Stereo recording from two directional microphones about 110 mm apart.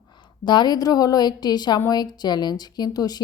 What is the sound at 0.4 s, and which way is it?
Speech, 40° left (ahead or behind).